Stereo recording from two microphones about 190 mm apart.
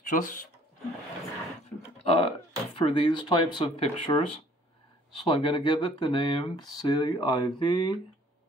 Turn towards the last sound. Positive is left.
turn(degrees=25)  # may be behind; listen again after turning